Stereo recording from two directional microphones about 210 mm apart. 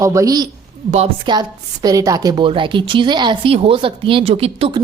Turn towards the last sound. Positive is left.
turn(degrees=-25)  # may be behind; listen again after turning